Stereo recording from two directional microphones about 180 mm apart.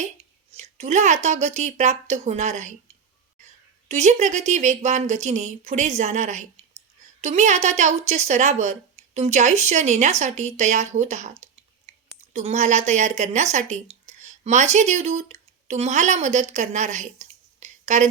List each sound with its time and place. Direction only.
0.5 s speech: 40° right (ahead or behind)
3.8 s speech: 40° right (ahead or behind)